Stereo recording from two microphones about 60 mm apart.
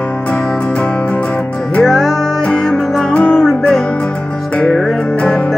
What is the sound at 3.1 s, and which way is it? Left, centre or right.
Music, left.